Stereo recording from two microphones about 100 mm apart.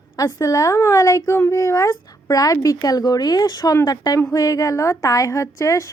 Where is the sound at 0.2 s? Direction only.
35° left (ahead or behind).